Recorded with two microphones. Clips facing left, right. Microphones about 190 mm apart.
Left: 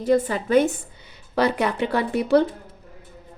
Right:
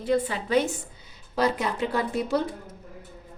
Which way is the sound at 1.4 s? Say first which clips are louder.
Left 4 dB; 65° left (ahead or behind).